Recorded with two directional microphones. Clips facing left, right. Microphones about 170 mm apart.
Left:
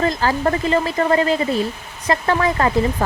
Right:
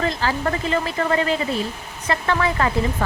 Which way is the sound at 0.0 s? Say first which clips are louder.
Left 4 dB; 40° left (ahead or behind).